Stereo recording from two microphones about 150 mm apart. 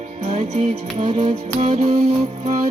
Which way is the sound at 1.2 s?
40° right (ahead or behind).